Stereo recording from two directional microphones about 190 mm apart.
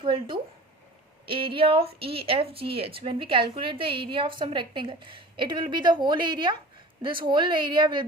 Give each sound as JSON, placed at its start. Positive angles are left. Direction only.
{"t": 0.0, "sound": "a woman's voice", "side_deg": -25}